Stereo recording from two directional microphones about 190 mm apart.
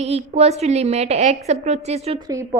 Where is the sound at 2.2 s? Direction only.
20° right (ahead or behind).